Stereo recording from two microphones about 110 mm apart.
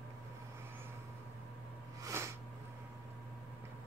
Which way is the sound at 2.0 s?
25° right (ahead or behind).